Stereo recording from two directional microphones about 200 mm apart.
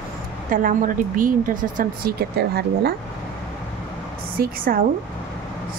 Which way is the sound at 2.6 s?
55° right (ahead or behind).